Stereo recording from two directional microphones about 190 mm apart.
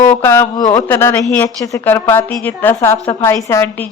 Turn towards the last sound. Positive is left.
turn(degrees=15)  # may be behind; listen again after turning